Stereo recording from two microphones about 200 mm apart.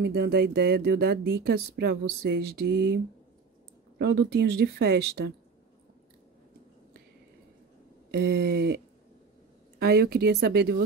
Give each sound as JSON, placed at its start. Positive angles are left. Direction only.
{"t": 0.0, "sound": "speech", "side_deg": -50}
{"t": 4.0, "sound": "speech", "side_deg": -55}
{"t": 8.1, "sound": "a sound", "side_deg": -55}
{"t": 9.8, "sound": "speech", "side_deg": -55}